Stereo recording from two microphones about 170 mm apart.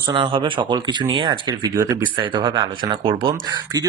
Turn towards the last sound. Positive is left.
turn(degrees=-30)  # may be behind; listen again after turning